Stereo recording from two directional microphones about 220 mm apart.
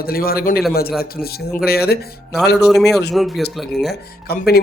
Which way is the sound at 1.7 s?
45° left (ahead or behind).